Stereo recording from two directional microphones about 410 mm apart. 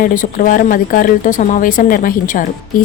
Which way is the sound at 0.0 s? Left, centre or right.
Centre.